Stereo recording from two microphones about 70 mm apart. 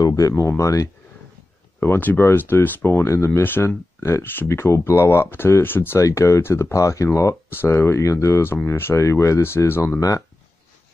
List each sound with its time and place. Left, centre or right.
0.0 s speech: left
0.3 s speech: left
1.8 s speech: left
5.9 s speech: left
9.9 s speech: left